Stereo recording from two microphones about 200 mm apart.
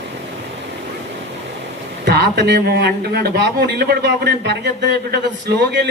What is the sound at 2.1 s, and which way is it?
A man's voice, 55° right (ahead or behind).